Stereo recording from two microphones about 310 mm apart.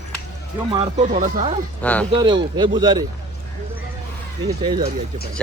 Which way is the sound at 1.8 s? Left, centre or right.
Centre.